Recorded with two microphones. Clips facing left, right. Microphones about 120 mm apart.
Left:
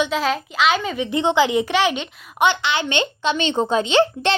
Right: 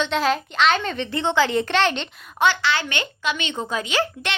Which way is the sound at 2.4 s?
20° left (ahead or behind).